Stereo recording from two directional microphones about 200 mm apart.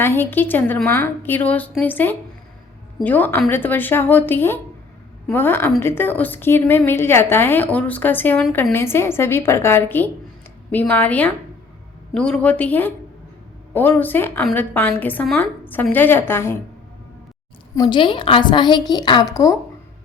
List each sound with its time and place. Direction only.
0.0 s a woman's voice: 10° left (ahead or behind)
17.7 s a woman's voice: 25° left (ahead or behind)